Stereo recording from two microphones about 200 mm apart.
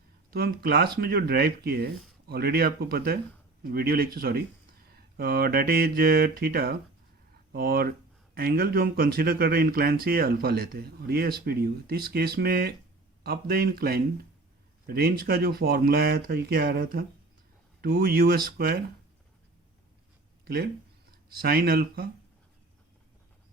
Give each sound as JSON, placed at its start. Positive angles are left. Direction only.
{"t": 0.3, "sound": "speech", "side_deg": -50}
{"t": 20.4, "sound": "speech", "side_deg": -50}